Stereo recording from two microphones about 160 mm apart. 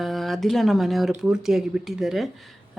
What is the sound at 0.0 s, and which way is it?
Speech, centre (ahead or behind).